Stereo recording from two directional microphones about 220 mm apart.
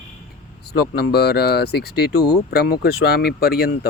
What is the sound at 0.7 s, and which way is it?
Speech, 45° left (ahead or behind).